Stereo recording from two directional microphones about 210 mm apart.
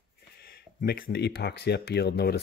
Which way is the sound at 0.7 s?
45° left (ahead or behind).